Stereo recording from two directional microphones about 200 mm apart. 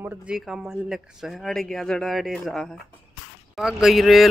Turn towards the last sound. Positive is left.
turn(degrees=0)  # may be behind; listen again after turning